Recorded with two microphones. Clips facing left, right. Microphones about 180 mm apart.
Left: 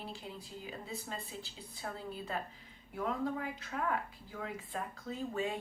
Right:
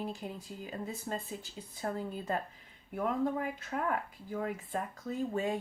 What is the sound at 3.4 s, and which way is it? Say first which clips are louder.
Speech: right 3 dB; 50° right (ahead or behind).